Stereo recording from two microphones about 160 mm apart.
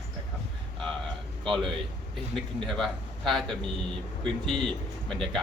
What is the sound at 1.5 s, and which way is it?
A man's voice, centre (ahead or behind).